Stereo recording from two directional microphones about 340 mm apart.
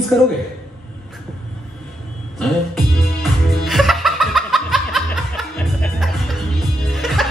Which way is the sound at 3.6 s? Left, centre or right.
Centre.